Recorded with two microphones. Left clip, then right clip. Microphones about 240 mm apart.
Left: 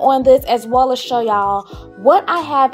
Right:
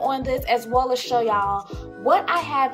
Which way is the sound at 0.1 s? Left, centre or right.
Left.